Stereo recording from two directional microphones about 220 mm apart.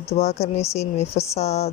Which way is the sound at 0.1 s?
30° left (ahead or behind).